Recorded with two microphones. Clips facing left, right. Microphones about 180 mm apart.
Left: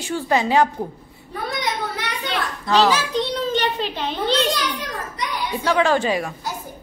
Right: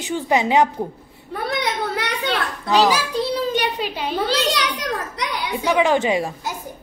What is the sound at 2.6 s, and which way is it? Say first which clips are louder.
A woman's voice: even; 15° right (ahead or behind).